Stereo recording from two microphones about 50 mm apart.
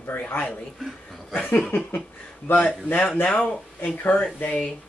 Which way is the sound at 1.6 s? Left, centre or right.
Left.